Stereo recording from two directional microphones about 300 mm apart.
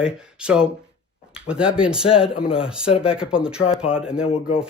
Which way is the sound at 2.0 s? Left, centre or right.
Centre.